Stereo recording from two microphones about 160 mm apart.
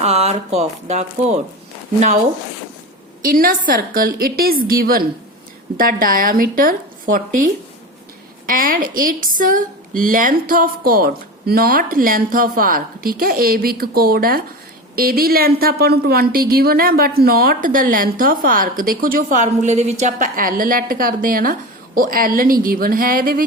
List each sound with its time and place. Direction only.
0.0 s speech: 40° right (ahead or behind)
3.2 s speech: 65° right (ahead or behind)